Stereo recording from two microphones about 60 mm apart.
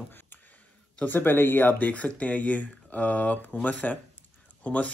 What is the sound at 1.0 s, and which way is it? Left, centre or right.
Speech, left.